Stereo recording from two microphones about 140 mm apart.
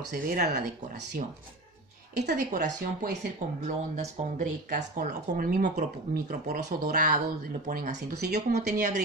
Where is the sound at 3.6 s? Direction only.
60° right (ahead or behind); by 8.0 s 80° right.